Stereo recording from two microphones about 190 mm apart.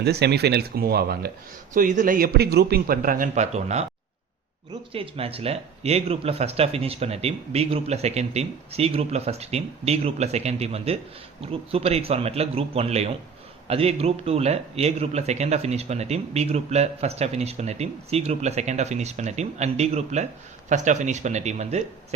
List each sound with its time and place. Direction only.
0.0 s speech: 60° right (ahead or behind)
1.7 s a man's voice: 45° right (ahead or behind)
4.9 s speech: 30° right (ahead or behind)